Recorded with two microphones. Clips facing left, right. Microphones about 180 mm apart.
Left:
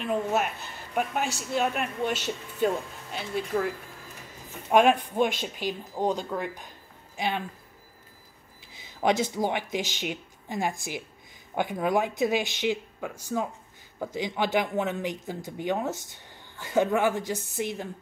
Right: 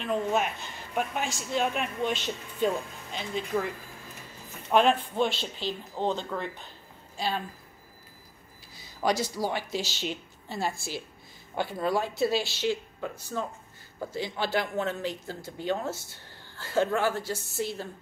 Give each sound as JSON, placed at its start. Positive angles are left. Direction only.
{"t": 0.0, "sound": "a woman's voice", "side_deg": 5}
{"t": 9.0, "sound": "speech", "side_deg": 20}
{"t": 13.3, "sound": "speech", "side_deg": 5}
{"t": 14.1, "sound": "speech", "side_deg": 15}